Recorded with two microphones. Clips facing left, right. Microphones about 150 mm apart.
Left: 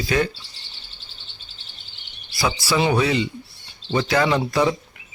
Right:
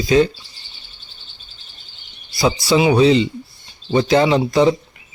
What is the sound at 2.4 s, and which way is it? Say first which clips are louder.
Speech: right 6 dB; 20° right (ahead or behind).